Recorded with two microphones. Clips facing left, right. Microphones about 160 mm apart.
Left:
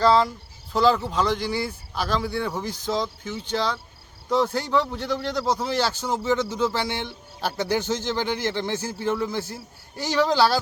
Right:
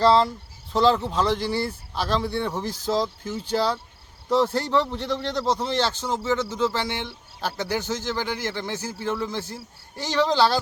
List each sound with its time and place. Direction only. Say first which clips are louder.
0.0 s speech: right 1 dB; 30° right (ahead or behind)
0.7 s a man's voice: even; centre (ahead or behind)
3.2 s speech: right 2 dB; 35° right (ahead or behind)
4.3 s a man's voice: right 1 dB; centre (ahead or behind)